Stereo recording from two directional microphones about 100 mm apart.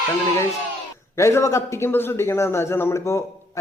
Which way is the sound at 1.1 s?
30° left (ahead or behind).